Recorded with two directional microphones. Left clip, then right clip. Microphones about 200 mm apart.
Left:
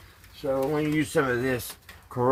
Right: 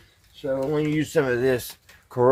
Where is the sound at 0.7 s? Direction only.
5° left (ahead or behind).